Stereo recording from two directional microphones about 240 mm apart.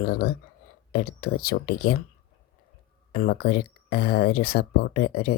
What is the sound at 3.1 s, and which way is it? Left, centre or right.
Speech, left.